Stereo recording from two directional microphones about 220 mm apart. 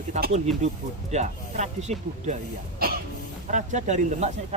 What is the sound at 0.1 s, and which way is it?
Speech, 30° right (ahead or behind).